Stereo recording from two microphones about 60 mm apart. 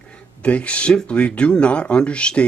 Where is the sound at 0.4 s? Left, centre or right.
Left.